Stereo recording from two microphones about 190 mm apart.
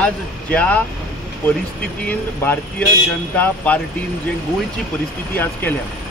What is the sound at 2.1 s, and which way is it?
Speech, 10° left (ahead or behind).